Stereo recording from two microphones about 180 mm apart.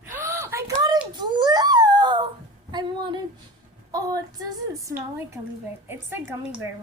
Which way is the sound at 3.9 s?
20° right (ahead or behind).